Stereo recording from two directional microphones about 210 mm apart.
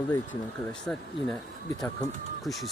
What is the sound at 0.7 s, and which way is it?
Speech, 5° left (ahead or behind).